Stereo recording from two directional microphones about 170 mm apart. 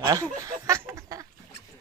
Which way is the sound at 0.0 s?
20° right (ahead or behind).